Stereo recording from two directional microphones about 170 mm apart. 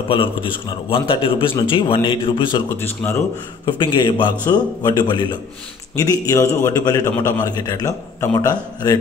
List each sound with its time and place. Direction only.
0.1 s a man's voice: 30° left (ahead or behind)
2.7 s speech: 15° left (ahead or behind)
3.6 s a man's voice: 25° left (ahead or behind)